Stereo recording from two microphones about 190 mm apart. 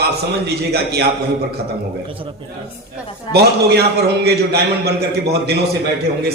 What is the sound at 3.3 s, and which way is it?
A man's voice, 60° right (ahead or behind).